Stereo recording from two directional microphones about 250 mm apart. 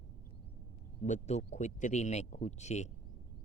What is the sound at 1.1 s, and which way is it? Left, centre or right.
Speech, left.